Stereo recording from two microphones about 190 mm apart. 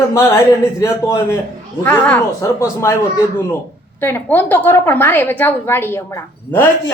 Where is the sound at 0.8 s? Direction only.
15° left (ahead or behind).